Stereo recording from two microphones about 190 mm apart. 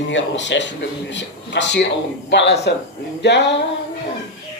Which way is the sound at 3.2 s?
65° left (ahead or behind).